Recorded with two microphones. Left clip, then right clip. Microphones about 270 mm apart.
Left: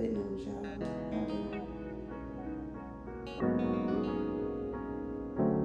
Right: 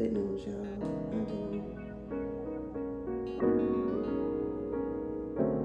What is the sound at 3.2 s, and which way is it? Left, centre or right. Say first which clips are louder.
Music: right 4 dB; centre.